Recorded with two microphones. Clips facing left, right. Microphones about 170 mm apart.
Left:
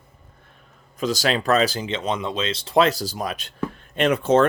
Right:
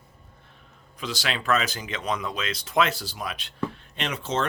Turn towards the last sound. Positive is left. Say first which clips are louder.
# left 11 dB
turn(degrees=55)  # may be behind; listen again after turning